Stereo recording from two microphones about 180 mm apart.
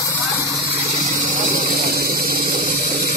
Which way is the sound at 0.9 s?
50° right (ahead or behind).